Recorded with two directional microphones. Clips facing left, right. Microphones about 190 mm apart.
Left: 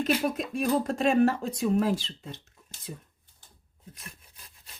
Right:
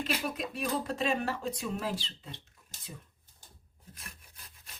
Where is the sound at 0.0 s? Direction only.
45° left (ahead or behind).